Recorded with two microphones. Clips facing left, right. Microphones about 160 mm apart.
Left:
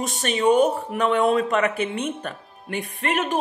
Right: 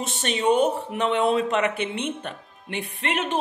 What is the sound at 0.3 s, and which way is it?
Speech, 40° left (ahead or behind).